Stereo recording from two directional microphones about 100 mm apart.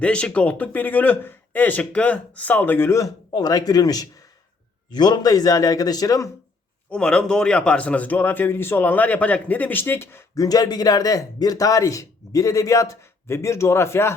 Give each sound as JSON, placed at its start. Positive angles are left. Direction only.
{"t": 0.0, "sound": "speech", "side_deg": 10}
{"t": 3.3, "sound": "a man's voice", "side_deg": 40}
{"t": 6.9, "sound": "a man's voice", "side_deg": 10}